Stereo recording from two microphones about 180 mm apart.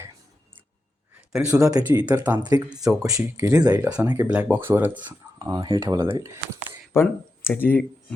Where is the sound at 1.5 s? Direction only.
15° right (ahead or behind).